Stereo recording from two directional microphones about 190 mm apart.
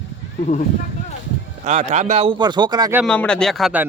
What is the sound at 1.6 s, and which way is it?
Speech, 40° right (ahead or behind).